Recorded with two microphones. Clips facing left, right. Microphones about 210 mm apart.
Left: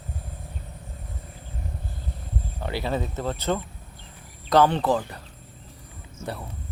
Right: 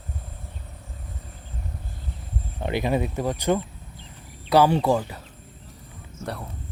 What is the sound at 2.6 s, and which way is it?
Speech, 20° right (ahead or behind).